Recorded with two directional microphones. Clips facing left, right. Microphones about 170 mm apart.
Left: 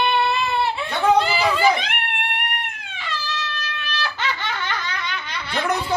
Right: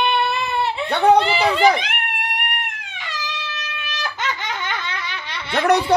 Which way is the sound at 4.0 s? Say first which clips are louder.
Right 1 dB; 15° right (ahead or behind).